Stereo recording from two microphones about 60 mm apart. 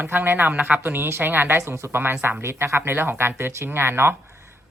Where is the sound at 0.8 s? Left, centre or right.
Right.